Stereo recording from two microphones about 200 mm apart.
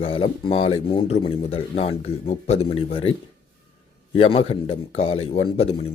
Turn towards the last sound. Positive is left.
turn(degrees=30)  # may be behind; listen again after turning